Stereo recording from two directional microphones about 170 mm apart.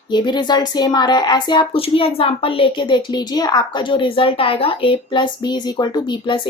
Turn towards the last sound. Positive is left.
turn(degrees=25)  # may be behind; listen again after turning